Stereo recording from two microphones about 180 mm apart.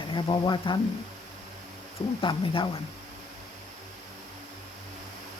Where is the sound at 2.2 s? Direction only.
25° left (ahead or behind).